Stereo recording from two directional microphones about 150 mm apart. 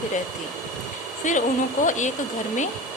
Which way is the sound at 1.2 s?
55° left (ahead or behind).